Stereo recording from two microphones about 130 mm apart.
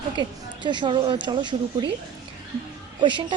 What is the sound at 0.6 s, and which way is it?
A woman's voice, 35° right (ahead or behind).